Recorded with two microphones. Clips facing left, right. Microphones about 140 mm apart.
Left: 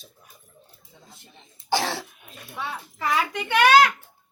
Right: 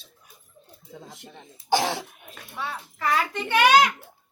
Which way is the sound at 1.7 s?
15° right (ahead or behind).